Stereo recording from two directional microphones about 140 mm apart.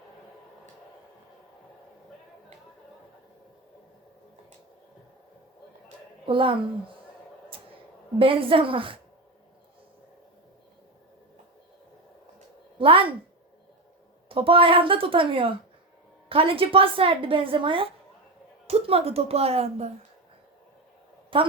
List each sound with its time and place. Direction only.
6.2 s a woman's voice: 40° right (ahead or behind)
8.2 s a woman's voice: 40° right (ahead or behind)
12.8 s a sound: 40° right (ahead or behind)
14.3 s a woman's voice: 40° right (ahead or behind)
21.3 s a woman's voice: 40° right (ahead or behind)